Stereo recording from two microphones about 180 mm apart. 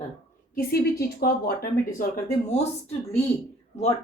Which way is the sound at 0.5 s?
60° left (ahead or behind).